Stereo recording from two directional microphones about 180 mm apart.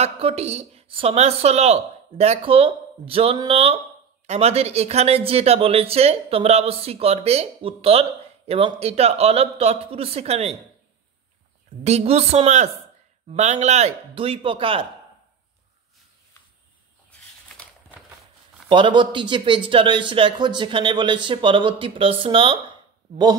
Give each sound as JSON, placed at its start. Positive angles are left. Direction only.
{"t": 0.0, "sound": "speech", "side_deg": -35}
{"t": 11.8, "sound": "speech", "side_deg": -35}
{"t": 18.7, "sound": "speech", "side_deg": -25}